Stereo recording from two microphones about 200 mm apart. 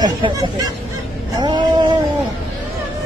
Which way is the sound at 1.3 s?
20° right (ahead or behind).